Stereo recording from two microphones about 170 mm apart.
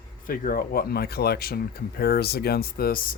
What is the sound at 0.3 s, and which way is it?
Speech, 55° left (ahead or behind).